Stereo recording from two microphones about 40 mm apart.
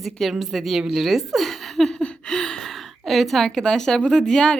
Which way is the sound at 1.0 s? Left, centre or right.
Centre.